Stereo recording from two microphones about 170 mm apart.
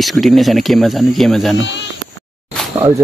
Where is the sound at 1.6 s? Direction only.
90° left.